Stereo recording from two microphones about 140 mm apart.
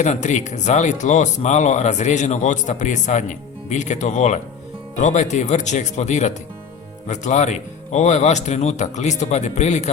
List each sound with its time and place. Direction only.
0.0 s speech: 60° left (ahead or behind)